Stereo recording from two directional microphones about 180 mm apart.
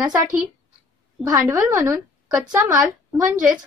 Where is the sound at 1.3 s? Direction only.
10° right (ahead or behind).